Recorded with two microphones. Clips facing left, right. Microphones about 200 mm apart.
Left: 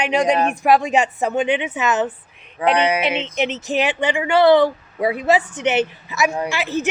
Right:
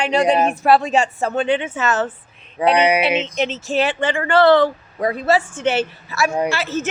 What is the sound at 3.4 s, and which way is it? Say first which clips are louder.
Speech: right 1 dB; 20° left (ahead or behind).